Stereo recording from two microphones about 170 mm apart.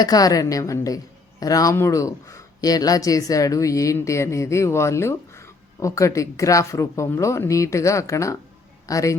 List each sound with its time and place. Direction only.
0.0 s a woman's voice: 20° left (ahead or behind)